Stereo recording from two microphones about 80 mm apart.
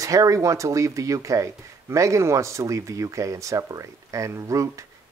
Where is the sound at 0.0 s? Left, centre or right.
Right.